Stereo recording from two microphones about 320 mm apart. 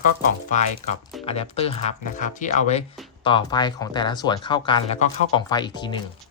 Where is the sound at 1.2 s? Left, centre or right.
Centre.